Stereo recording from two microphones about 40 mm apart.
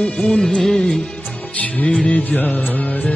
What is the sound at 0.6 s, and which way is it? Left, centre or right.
Music, centre.